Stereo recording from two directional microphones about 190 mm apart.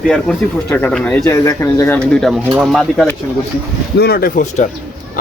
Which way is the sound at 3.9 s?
55° left (ahead or behind).